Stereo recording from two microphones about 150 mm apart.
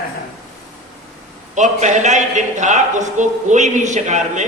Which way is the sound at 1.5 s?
55° right (ahead or behind).